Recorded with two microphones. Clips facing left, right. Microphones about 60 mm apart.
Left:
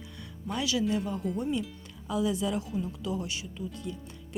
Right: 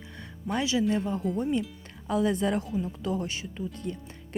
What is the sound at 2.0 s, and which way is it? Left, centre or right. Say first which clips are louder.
Speech: right 3 dB; right.